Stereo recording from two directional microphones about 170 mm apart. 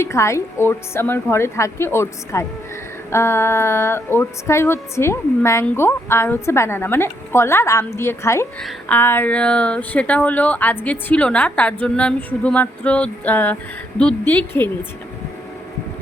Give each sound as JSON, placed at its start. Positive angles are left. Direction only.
{"t": 0.0, "sound": "speech", "side_deg": 15}